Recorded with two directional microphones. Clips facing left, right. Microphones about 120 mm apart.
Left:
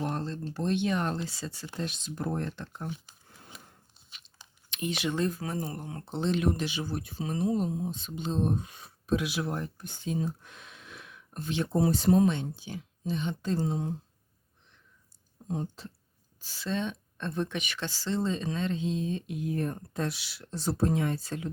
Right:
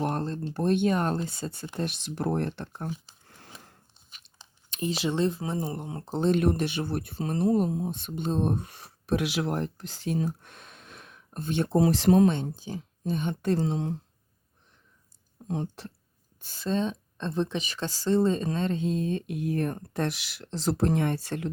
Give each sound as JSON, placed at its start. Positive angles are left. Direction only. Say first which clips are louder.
{"t": 0.0, "sound": "a sound", "louder": "right 4 dB", "side_deg": -55}
{"t": 0.4, "sound": "speech", "louder": "right 5 dB", "side_deg": -55}
{"t": 1.7, "sound": "speech", "louder": "right 3 dB", "side_deg": -65}
{"t": 4.4, "sound": "speech", "louder": "right 3 dB", "side_deg": -35}
{"t": 6.1, "sound": "speech", "louder": "right 4 dB", "side_deg": -50}
{"t": 10.4, "sound": "a sound", "louder": "even", "side_deg": -50}
{"t": 11.7, "sound": "speech", "louder": "right 3 dB", "side_deg": -90}
{"t": 12.3, "sound": "speech", "louder": "right 3 dB", "side_deg": -40}
{"t": 15.4, "sound": "speech", "louder": "right 2 dB", "side_deg": -75}
{"t": 16.4, "sound": "speech", "louder": "right 4 dB", "side_deg": -50}